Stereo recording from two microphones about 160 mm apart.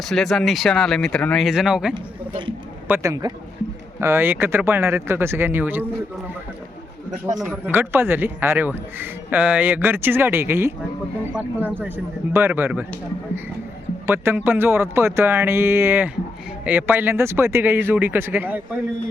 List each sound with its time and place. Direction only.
0.1 s speech: centre (ahead or behind)
2.8 s a man's voice: 15° right (ahead or behind)
7.6 s a man's voice: 15° right (ahead or behind)
14.1 s a man's voice: 15° right (ahead or behind)